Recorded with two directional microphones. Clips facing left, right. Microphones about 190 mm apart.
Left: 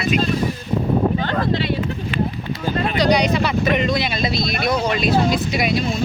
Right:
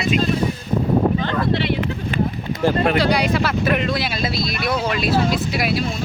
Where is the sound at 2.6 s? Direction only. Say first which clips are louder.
Right 5 dB; 65° right (ahead or behind).